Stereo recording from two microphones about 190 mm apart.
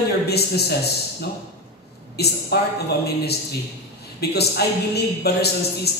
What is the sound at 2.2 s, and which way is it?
A man's voice, 55° left (ahead or behind).